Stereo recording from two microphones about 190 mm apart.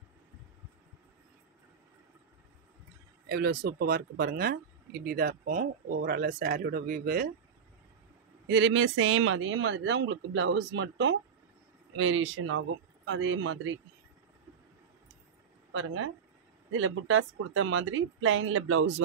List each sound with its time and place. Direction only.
3.3 s speech: 55° right (ahead or behind)
8.5 s speech: 70° right (ahead or behind); by 13.7 s 90° right
15.7 s speech: 90° right